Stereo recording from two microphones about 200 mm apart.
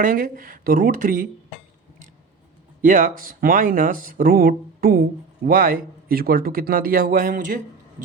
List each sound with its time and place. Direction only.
0.0 s speech: 45° right (ahead or behind)
2.8 s speech: 40° right (ahead or behind)